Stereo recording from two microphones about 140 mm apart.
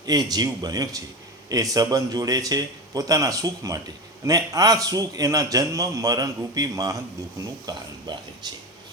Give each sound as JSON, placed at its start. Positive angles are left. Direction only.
{"t": 0.0, "sound": "a man's voice", "side_deg": -30}